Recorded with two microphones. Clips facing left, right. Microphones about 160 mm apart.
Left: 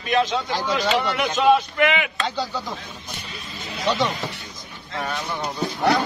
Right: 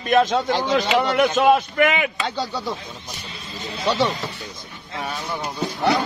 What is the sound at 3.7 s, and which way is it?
Speech, 30° right (ahead or behind).